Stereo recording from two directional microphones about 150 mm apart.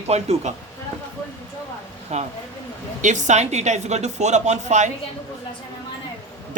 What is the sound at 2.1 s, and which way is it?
Speech, 45° right (ahead or behind).